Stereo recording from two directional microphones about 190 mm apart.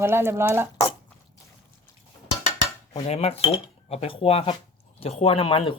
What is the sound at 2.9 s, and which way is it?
Speech, 30° left (ahead or behind).